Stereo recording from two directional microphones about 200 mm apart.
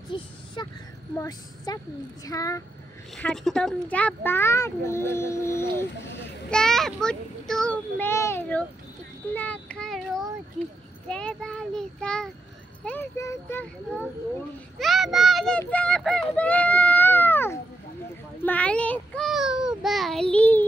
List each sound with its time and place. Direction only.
0.1 s speech: 25° left (ahead or behind)
0.6 s a sound: 25° left (ahead or behind)
1.1 s a child's voice: 15° left (ahead or behind)
3.2 s a child's voice: 5° left (ahead or behind)
5.9 s a child's voice: 60° left (ahead or behind)
6.5 s a child's voice: 5° left (ahead or behind)
9.3 s a sound: 10° left (ahead or behind)
11.1 s a child's voice: 5° left (ahead or behind)
14.8 s a child's voice: centre (ahead or behind)